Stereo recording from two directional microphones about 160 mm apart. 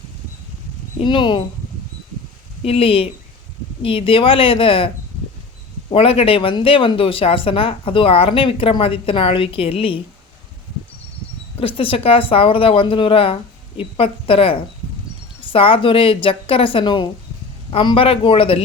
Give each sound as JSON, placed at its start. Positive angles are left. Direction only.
{"t": 0.9, "sound": "speech", "side_deg": 30}
{"t": 2.6, "sound": "speech", "side_deg": 35}
{"t": 5.9, "sound": "speech", "side_deg": 35}
{"t": 11.6, "sound": "speech", "side_deg": 35}